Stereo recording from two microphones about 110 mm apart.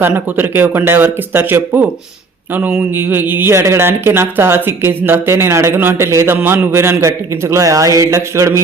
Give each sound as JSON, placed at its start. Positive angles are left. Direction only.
{"t": 0.0, "sound": "speech", "side_deg": -20}